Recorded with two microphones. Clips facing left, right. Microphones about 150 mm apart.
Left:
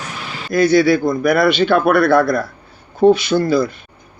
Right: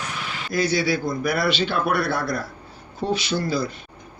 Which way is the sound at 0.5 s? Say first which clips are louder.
Left 10 dB; 55° left (ahead or behind).